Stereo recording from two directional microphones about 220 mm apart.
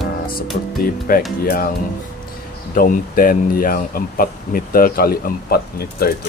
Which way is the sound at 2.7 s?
40° left (ahead or behind).